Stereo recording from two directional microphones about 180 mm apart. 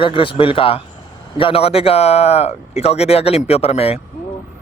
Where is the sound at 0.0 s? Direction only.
30° left (ahead or behind).